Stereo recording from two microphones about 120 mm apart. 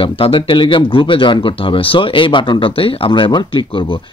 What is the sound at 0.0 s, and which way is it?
Speech, 45° left (ahead or behind).